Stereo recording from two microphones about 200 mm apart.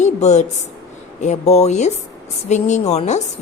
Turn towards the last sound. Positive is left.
turn(degrees=35)  # may be behind; listen again after turning